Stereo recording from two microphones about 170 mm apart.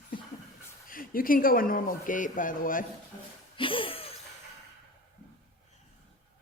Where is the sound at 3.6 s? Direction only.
30° left (ahead or behind).